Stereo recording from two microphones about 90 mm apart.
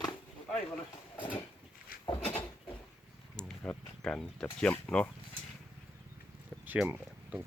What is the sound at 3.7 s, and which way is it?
Speech, 10° left (ahead or behind).